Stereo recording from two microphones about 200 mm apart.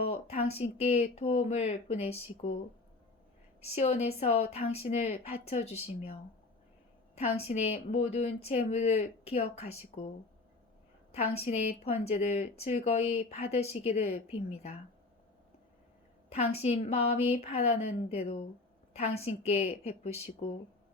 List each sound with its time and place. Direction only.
0.0 s a woman's voice: 30° left (ahead or behind)
3.8 s a woman's voice: 30° left (ahead or behind)
7.2 s a woman's voice: 30° left (ahead or behind)
11.1 s a woman's voice: 30° left (ahead or behind)
16.3 s a woman's voice: 30° left (ahead or behind)